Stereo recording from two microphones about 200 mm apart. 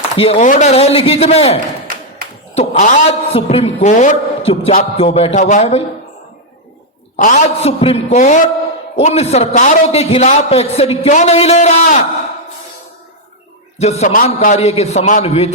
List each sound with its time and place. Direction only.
0.2 s a man's voice: 35° left (ahead or behind)
2.6 s a man's voice: 35° left (ahead or behind)
7.2 s a man's voice: 40° left (ahead or behind)
13.7 s a man's voice: 35° left (ahead or behind)